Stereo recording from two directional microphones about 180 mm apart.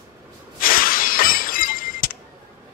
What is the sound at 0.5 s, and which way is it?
Shatter, 50° left (ahead or behind).